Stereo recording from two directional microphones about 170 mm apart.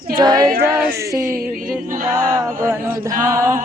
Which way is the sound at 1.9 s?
55° right (ahead or behind).